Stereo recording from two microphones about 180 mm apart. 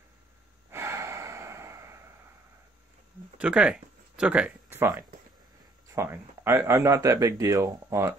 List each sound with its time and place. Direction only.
0.7 s gasp: 15° right (ahead or behind)
3.3 s speech: 5° right (ahead or behind)